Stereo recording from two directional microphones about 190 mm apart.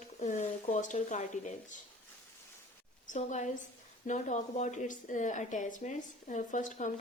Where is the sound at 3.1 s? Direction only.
40° left (ahead or behind).